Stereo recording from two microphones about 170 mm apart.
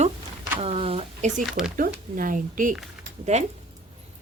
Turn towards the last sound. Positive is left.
turn(degrees=-45)  # may be behind; listen again after turning